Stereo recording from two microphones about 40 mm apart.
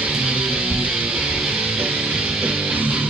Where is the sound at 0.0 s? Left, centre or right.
Right.